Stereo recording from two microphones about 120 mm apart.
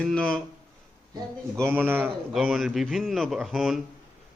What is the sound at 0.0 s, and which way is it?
Speech, 5° left (ahead or behind).